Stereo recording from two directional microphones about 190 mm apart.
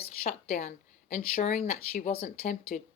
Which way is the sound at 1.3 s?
35° left (ahead or behind).